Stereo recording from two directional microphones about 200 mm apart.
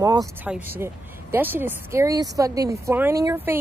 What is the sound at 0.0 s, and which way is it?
Speech, 15° right (ahead or behind).